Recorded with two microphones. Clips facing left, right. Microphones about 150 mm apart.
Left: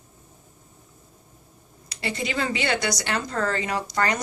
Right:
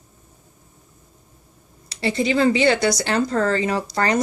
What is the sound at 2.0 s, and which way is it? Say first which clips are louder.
Speech: right 9 dB; 30° right (ahead or behind).